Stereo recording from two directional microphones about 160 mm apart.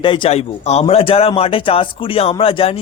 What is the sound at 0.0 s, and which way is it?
Speech, 30° left (ahead or behind).